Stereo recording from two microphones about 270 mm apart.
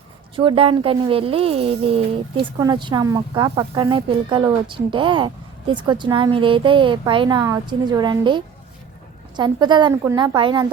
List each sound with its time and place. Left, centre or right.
0.3 s speech: centre